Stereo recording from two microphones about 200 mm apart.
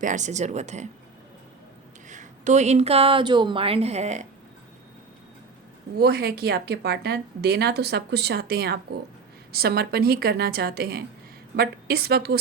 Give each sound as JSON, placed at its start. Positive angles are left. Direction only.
{"t": 0.0, "sound": "a woman's voice", "side_deg": -40}
{"t": 2.0, "sound": "a woman's voice", "side_deg": -35}
{"t": 6.0, "sound": "a woman's voice", "side_deg": -50}